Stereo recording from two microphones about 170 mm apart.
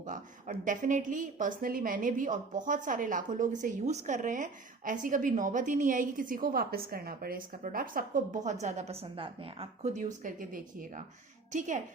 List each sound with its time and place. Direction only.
0.0 s a woman's voice: 50° right (ahead or behind)
8.6 s a woman's voice: 40° right (ahead or behind)